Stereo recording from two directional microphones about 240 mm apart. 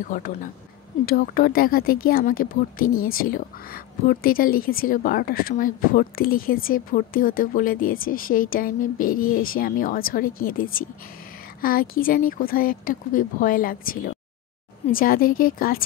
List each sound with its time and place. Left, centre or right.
0.1 s a woman's voice: left